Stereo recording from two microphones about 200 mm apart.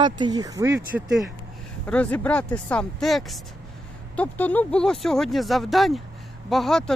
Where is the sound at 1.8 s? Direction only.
5° left (ahead or behind).